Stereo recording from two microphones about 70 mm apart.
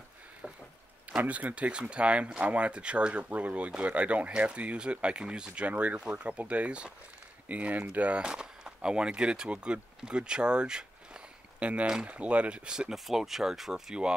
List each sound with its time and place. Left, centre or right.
1.1 s speech: right